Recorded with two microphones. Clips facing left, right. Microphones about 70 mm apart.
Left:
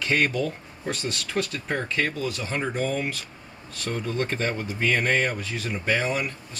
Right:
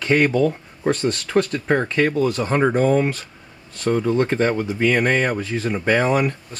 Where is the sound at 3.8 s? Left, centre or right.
Right.